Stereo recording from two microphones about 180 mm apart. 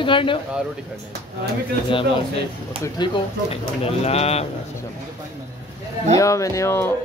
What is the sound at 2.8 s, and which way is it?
Speech, 25° left (ahead or behind).